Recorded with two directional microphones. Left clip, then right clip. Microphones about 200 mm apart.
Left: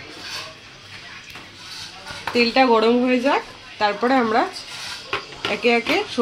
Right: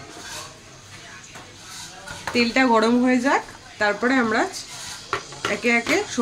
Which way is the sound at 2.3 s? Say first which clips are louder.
Left 2 dB; 35° right (ahead or behind).